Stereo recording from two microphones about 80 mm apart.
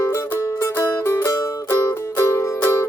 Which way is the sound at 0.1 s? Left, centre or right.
Left.